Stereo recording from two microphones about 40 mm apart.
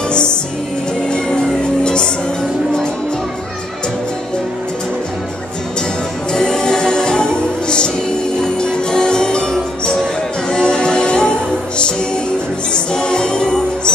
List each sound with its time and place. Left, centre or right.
1.1 s music: left
6.3 s music: centre
12.7 s music: left